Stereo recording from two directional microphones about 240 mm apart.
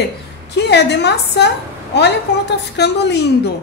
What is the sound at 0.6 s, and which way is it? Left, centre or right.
A woman's voice, left.